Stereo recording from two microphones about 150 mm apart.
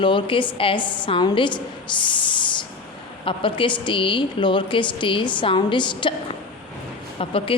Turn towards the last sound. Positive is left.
turn(degrees=35)  # may be behind; listen again after turning